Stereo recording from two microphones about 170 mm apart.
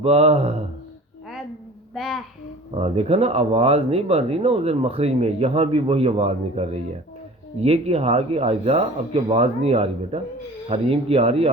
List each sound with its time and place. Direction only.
0.0 s speech: 35° right (ahead or behind)
2.0 s a child's voice: centre (ahead or behind)
2.8 s speech: 35° right (ahead or behind)